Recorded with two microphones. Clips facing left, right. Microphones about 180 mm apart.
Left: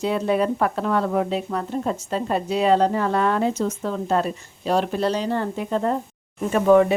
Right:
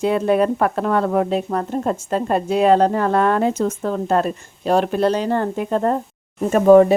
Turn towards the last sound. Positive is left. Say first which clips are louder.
# right 5 dB
turn(degrees=-40)  # may be behind; listen again after turning